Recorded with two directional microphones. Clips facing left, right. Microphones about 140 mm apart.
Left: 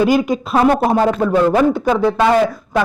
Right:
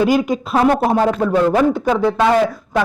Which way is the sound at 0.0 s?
10° left (ahead or behind).